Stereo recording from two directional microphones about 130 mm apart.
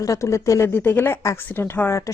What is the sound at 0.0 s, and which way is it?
A woman's voice, 25° left (ahead or behind).